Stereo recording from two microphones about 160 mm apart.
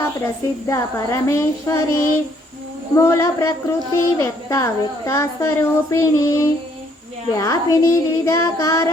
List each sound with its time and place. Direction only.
0.7 s a woman's voice: 20° left (ahead or behind)